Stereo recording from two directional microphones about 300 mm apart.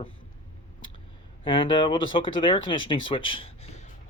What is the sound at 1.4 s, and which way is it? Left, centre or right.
Speech, centre.